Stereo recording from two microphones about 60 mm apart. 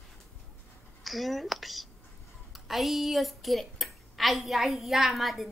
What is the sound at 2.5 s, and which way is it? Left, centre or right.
A woman's voice, centre.